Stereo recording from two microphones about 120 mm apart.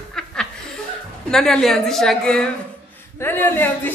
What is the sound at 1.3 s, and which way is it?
A woman's voice, 5° left (ahead or behind).